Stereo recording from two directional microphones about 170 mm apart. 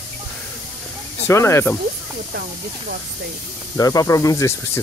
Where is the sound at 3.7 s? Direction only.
20° left (ahead or behind).